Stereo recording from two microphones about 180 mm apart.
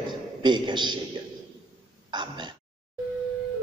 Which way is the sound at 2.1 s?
25° right (ahead or behind).